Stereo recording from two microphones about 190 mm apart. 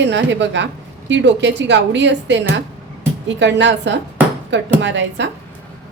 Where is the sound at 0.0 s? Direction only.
70° right (ahead or behind).